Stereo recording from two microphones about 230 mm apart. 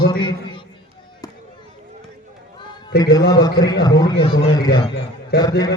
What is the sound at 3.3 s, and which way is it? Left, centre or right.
Speech, centre.